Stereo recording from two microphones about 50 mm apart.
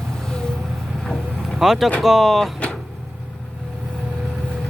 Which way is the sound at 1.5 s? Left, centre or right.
Centre.